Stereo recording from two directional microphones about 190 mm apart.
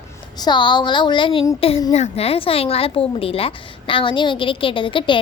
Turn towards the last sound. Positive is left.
turn(degrees=25)  # may be behind; listen again after turning